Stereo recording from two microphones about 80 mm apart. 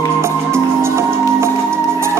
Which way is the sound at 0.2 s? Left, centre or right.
Right.